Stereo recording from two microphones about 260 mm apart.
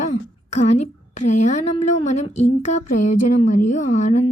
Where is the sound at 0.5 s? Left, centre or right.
Left.